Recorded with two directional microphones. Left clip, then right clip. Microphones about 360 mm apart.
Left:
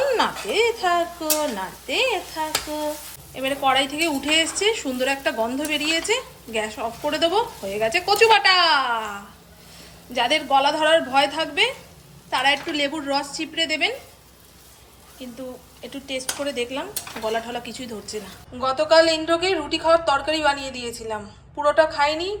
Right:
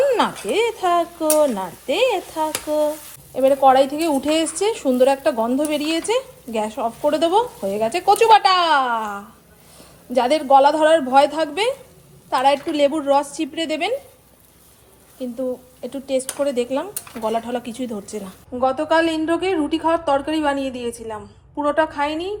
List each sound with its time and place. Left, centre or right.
0.0 s a woman's voice: centre
15.2 s a woman's voice: centre